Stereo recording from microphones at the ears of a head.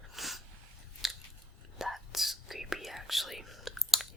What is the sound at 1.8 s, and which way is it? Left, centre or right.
Whispering, centre.